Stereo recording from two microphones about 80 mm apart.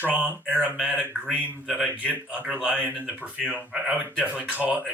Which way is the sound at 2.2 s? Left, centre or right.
Centre.